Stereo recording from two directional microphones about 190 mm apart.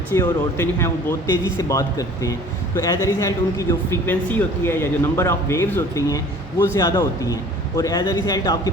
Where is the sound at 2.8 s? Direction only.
15° left (ahead or behind).